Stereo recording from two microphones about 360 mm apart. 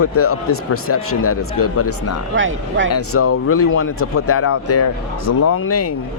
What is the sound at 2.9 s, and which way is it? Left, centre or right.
A man's voice, left.